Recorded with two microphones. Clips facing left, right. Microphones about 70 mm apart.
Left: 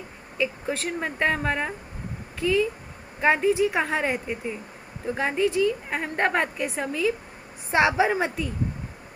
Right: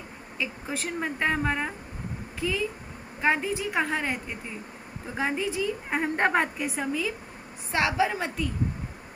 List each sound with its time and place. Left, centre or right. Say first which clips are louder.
0.4 s a woman's voice: left 5 dB; centre
5.1 s a woman's voice: left 5 dB; centre
7.7 s a woman's voice: left 4 dB; left